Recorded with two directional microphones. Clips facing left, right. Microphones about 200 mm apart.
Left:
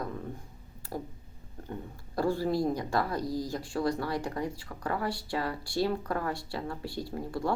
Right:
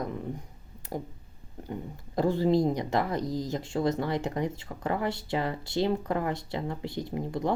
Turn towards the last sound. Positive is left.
turn(degrees=-20)  # may be behind; listen again after turning